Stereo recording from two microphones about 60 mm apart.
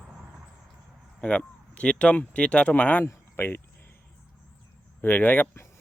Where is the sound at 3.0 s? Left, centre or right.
Left.